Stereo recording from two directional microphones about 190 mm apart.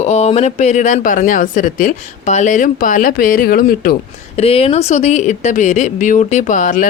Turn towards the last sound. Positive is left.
turn(degrees=40)  # may be behind; listen again after turning